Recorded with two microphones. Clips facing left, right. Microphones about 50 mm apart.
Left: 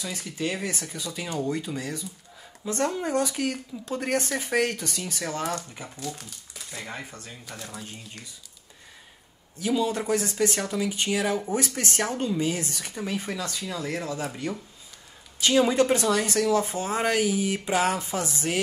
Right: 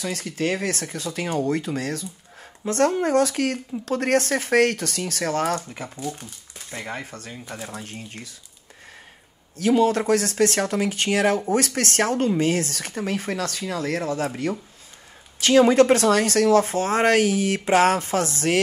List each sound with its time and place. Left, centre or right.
0.0 s speech: right
5.9 s speech: centre
6.7 s speech: right
7.3 s speech: centre
7.7 s speech: right
9.6 s speech: right
15.7 s speech: right